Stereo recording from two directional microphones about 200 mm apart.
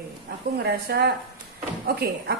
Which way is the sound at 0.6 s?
55° right (ahead or behind).